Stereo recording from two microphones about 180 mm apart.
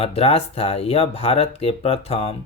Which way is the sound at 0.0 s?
35° left (ahead or behind).